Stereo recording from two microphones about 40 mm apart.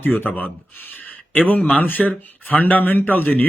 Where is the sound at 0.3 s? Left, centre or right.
Left.